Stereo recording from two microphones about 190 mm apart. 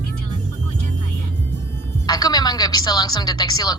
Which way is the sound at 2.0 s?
20° left (ahead or behind).